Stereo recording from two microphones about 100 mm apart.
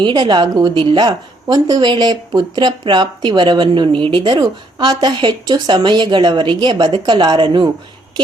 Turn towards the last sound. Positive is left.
turn(degrees=-55)  # may be behind; listen again after turning